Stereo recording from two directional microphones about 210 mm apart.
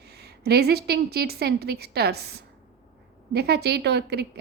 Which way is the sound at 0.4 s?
50° right (ahead or behind).